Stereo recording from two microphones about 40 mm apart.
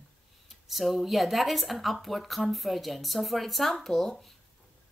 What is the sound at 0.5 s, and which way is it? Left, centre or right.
Speech, centre.